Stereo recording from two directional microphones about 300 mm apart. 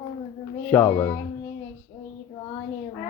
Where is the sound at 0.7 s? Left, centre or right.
Centre.